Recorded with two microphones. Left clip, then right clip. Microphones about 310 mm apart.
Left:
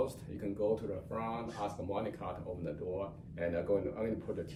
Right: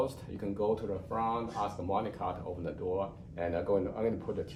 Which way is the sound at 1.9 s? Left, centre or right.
Centre.